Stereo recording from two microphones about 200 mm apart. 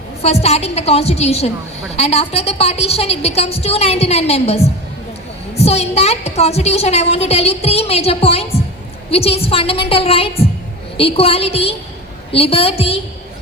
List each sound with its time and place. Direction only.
0.2 s a woman's voice: 30° left (ahead or behind)